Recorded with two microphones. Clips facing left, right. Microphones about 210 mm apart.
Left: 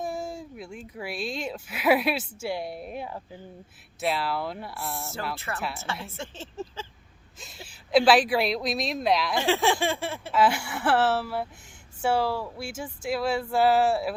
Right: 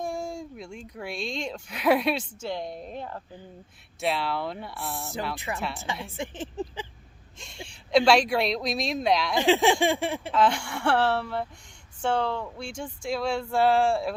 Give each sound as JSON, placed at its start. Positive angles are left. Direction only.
{"t": 0.0, "sound": "speech", "side_deg": 5}
{"t": 6.1, "sound": "speech", "side_deg": -15}
{"t": 7.3, "sound": "a woman's voice", "side_deg": 5}
{"t": 9.4, "sound": "a sound", "side_deg": -15}
{"t": 10.3, "sound": "speech", "side_deg": 5}